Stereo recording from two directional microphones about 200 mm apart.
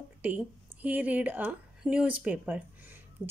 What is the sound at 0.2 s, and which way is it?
A woman's voice, 10° right (ahead or behind).